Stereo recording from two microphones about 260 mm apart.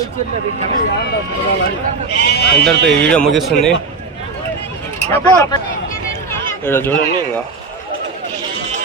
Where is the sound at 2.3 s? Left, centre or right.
Left.